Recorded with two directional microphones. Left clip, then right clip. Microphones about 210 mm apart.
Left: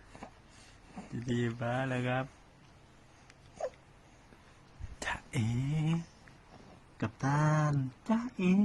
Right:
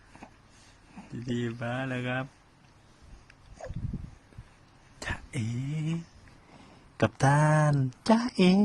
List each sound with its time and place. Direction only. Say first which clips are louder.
1.2 s speech: right 1 dB; centre (ahead or behind)
4.9 s a sound: even; centre (ahead or behind)
6.9 s speech: right 9 dB; 40° right (ahead or behind)